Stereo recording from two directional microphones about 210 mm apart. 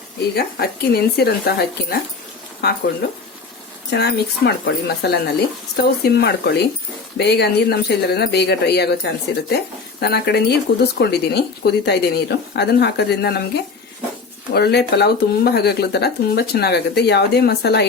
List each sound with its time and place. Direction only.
0.3 s speech: 50° left (ahead or behind)
3.8 s speech: 50° left (ahead or behind)
14.5 s speech: 50° left (ahead or behind)